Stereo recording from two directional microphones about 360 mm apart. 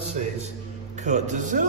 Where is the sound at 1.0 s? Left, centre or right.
Centre.